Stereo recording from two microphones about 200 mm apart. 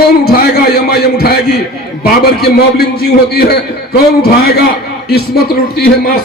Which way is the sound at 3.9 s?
50° left (ahead or behind).